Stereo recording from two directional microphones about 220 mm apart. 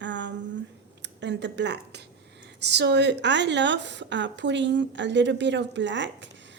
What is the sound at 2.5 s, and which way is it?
A woman's voice, 50° right (ahead or behind).